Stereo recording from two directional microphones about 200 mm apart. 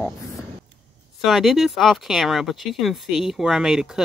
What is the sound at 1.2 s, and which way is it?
Speech, centre (ahead or behind).